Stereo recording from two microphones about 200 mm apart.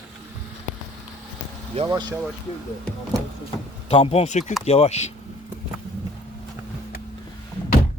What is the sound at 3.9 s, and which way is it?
Speech, 25° left (ahead or behind).